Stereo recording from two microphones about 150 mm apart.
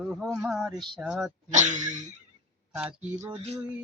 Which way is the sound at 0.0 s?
Centre (ahead or behind).